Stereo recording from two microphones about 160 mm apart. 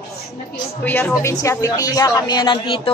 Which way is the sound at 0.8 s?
10° left (ahead or behind).